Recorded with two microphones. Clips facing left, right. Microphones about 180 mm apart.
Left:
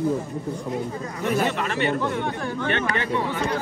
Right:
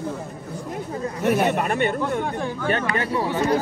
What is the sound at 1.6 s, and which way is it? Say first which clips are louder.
Speech: right 2 dB; 50° right (ahead or behind).